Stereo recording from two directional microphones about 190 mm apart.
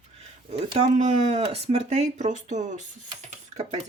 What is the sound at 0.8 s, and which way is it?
Speech, 35° right (ahead or behind).